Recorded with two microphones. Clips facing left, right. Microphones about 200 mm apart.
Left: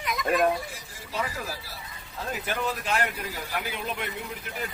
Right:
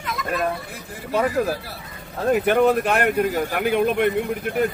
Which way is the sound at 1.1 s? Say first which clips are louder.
Right 12 dB; 55° right (ahead or behind).